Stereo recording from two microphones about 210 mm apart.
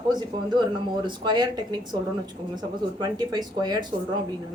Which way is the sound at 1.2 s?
20° right (ahead or behind).